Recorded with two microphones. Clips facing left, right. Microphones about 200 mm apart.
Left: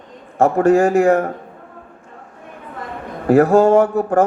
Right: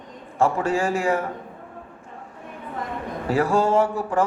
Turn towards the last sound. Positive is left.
turn(degrees=60)  # may be behind; listen again after turning